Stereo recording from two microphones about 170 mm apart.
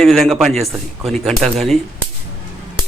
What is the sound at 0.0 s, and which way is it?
A man's voice, centre (ahead or behind).